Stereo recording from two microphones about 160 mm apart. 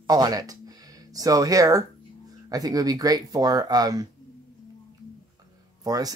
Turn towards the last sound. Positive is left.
turn(degrees=-25)  # may be behind; listen again after turning